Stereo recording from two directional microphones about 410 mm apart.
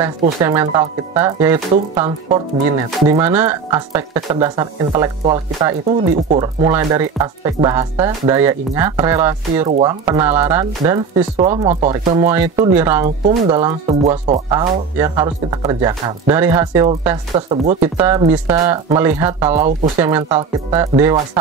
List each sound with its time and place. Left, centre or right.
0.2 s speech: centre